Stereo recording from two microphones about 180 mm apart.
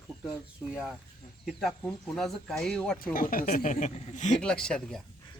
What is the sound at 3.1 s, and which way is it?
Speech, 50° left (ahead or behind).